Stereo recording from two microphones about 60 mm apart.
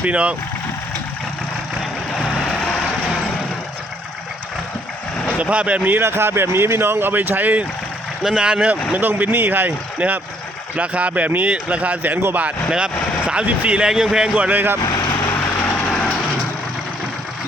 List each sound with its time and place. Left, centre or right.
0.0 s speech: right
5.4 s speech: right
6.0 s speech: right
8.2 s speech: centre
9.0 s speech: right
10.8 s speech: right
12.7 s speech: centre
13.8 s speech: centre
14.3 s speech: right
15.9 s vehicle: centre